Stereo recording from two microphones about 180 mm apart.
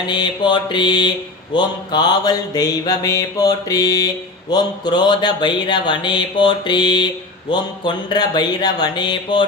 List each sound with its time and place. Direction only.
0.1 s mantra: 25° left (ahead or behind)